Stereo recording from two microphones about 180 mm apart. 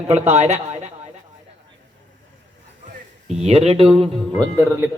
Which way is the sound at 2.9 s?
40° right (ahead or behind).